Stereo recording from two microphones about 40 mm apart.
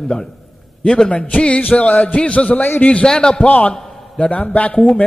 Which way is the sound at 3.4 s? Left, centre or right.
Left.